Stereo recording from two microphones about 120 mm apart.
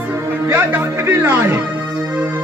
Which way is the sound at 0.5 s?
20° right (ahead or behind).